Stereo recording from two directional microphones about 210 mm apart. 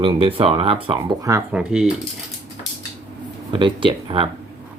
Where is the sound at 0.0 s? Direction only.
25° right (ahead or behind).